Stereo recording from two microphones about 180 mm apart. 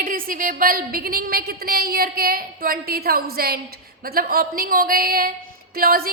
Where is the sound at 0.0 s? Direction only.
50° right (ahead or behind).